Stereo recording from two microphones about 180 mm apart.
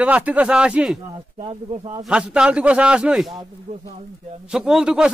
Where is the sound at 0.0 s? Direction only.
5° right (ahead or behind).